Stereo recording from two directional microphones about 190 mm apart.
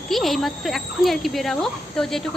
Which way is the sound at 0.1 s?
Centre (ahead or behind).